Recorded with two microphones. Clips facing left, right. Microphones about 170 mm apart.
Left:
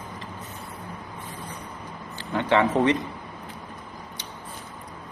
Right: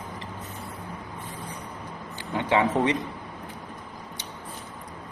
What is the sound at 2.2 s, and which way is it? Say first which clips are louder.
Speech: left 2 dB; 15° right (ahead or behind).